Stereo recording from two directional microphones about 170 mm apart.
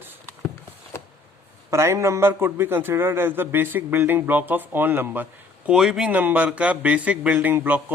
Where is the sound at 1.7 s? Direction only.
15° right (ahead or behind).